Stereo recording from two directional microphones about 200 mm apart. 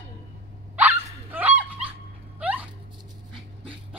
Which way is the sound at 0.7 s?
10° right (ahead or behind).